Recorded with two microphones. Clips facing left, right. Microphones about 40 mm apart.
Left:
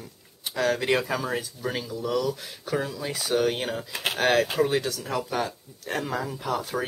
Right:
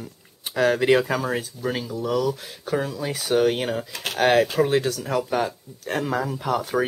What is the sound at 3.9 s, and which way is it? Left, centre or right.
Speech, centre.